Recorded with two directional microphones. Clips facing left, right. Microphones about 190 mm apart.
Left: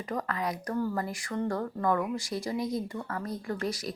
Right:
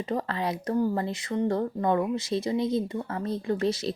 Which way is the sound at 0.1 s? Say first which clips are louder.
Right 2 dB; 30° right (ahead or behind).